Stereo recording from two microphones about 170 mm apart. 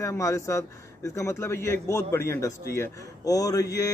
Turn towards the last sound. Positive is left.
turn(degrees=20)  # may be behind; listen again after turning